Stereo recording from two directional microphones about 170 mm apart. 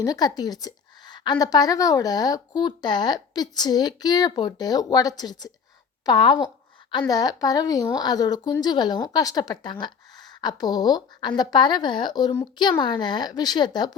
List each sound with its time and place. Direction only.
0.0 s a woman's voice: 20° left (ahead or behind)